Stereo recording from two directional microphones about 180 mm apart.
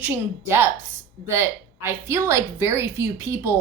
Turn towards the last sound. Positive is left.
turn(degrees=-15)  # may be behind; listen again after turning